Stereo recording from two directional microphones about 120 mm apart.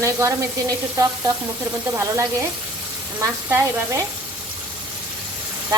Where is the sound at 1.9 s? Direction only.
25° right (ahead or behind).